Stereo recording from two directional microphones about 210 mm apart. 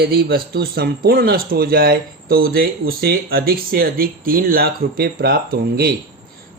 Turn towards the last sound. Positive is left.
turn(degrees=-50)  # may be behind; listen again after turning